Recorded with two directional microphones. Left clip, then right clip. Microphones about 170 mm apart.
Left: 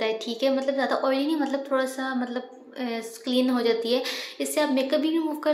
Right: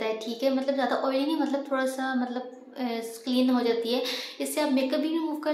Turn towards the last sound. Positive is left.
turn(degrees=20)  # may be behind; listen again after turning